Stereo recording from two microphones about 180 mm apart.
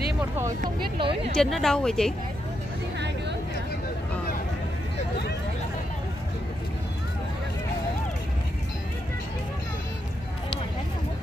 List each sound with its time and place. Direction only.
0.9 s speech: 30° right (ahead or behind)
1.3 s a woman's voice: centre (ahead or behind)